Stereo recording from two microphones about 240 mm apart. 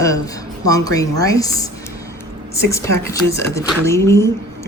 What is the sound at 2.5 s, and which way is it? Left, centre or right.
A woman's voice, centre.